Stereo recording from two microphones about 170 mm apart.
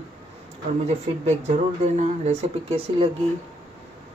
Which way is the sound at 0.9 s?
40° right (ahead or behind).